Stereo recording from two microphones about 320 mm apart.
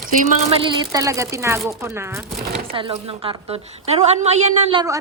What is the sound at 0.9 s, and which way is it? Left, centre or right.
A woman's voice, centre.